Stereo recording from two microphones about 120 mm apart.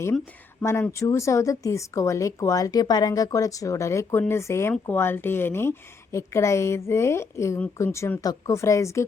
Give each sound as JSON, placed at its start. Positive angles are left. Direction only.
{"t": 0.6, "sound": "speech", "side_deg": 20}